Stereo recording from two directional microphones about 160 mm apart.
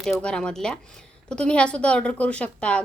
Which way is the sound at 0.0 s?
5° left (ahead or behind).